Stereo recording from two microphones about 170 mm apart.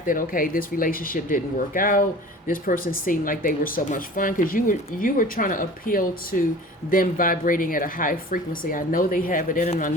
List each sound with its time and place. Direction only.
0.0 s speech: 55° left (ahead or behind)